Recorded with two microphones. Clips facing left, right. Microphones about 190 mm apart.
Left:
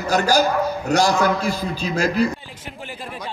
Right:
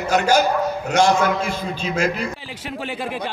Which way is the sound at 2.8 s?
85° right.